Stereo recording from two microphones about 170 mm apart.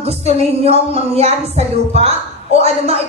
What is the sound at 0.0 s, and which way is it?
Speech, 35° right (ahead or behind).